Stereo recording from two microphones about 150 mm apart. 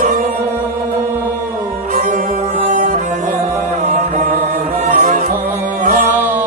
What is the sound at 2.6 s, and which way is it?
Music, 55° right (ahead or behind).